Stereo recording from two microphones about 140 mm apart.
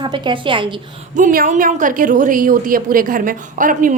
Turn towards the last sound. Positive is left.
turn(degrees=-70)  # may be behind; listen again after turning